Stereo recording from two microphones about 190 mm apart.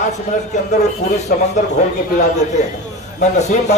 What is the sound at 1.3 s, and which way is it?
Speech, 50° left (ahead or behind).